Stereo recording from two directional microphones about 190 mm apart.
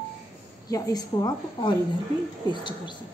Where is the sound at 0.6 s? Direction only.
20° left (ahead or behind).